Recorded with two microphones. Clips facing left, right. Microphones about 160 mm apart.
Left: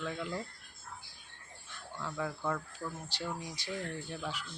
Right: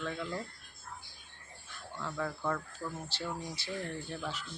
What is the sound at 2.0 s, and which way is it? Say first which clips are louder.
Speech: right 1 dB; 10° left (ahead or behind).